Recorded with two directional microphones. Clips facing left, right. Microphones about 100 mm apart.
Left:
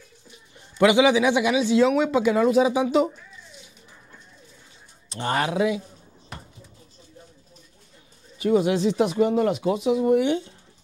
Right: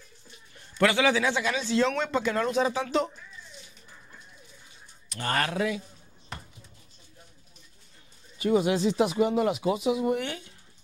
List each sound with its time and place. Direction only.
0.6 s a man's voice: 15° left (ahead or behind)
5.1 s a man's voice: 20° left (ahead or behind)
8.4 s speech: centre (ahead or behind)
10.2 s speech: 25° left (ahead or behind)